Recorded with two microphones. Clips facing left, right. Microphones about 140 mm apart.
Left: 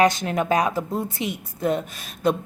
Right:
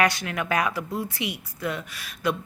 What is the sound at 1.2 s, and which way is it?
Speech, 50° left (ahead or behind).